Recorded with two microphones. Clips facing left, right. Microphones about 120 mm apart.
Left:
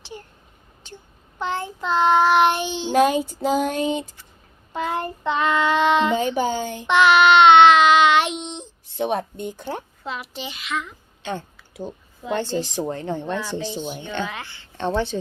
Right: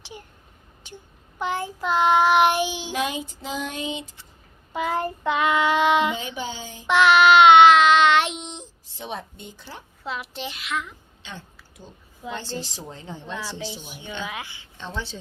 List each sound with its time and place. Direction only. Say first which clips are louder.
0.0 s a sound: left 3 dB; 10° right (ahead or behind)
1.4 s child singing: even; 10° right (ahead or behind)
2.9 s a sound: left 10 dB; 45° left (ahead or behind)
4.7 s child singing: even; 5° right (ahead or behind)
6.1 s a sound: left 10 dB; 45° left (ahead or behind)
6.8 s child singing: left 1 dB; centre (ahead or behind)
8.9 s speech: left 11 dB; 60° left (ahead or behind)
10.0 s a child's voice: even; centre (ahead or behind)
11.2 s a woman's voice: left 12 dB; 55° left (ahead or behind)
14.3 s child singing: left 1 dB; 10° right (ahead or behind)
14.8 s speech: left 11 dB; 60° left (ahead or behind)